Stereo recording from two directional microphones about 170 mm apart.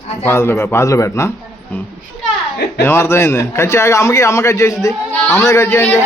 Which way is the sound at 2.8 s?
15° left (ahead or behind).